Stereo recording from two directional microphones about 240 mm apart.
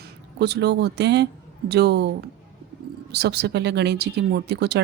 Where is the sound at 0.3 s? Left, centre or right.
Right.